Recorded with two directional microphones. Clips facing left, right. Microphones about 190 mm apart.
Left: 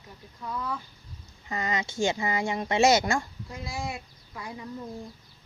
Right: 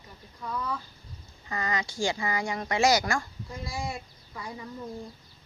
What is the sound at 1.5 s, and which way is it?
Speech, 20° left (ahead or behind).